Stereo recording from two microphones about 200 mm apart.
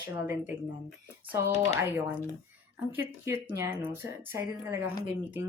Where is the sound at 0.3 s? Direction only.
10° right (ahead or behind).